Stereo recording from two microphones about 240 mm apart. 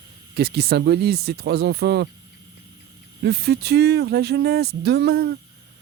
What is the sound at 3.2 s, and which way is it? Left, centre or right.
Speech, right.